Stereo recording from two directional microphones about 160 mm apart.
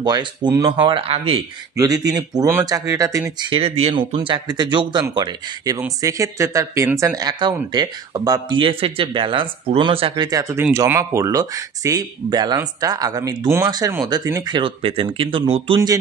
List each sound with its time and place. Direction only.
0.0 s speech: 25° right (ahead or behind)
1.8 s speech: 25° right (ahead or behind)
3.4 s speech: 35° right (ahead or behind)
14.6 s speech: 35° right (ahead or behind)